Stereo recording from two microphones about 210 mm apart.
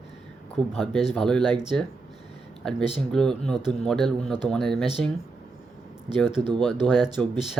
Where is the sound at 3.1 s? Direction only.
5° left (ahead or behind).